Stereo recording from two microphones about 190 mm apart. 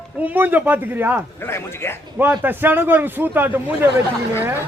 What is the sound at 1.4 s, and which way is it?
Speech, 10° left (ahead or behind).